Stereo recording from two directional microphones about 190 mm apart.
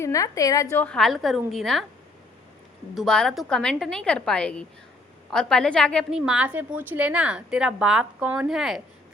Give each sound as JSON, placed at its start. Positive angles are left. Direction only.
{"t": 0.0, "sound": "a woman's voice", "side_deg": 15}
{"t": 0.9, "sound": "a woman's voice", "side_deg": 0}
{"t": 2.9, "sound": "a woman's voice", "side_deg": 0}